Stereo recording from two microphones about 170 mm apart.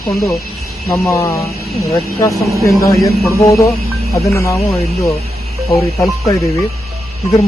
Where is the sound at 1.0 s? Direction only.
20° left (ahead or behind).